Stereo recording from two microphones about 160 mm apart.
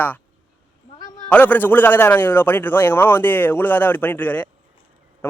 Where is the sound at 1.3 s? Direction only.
10° left (ahead or behind).